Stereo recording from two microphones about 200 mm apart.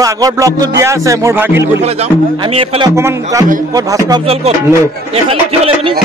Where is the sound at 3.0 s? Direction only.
15° right (ahead or behind).